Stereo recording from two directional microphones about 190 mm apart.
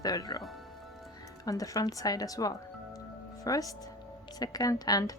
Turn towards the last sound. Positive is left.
turn(degrees=20)  # may be behind; listen again after turning